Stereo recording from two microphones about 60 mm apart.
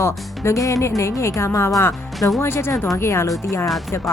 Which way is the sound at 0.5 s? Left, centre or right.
Left.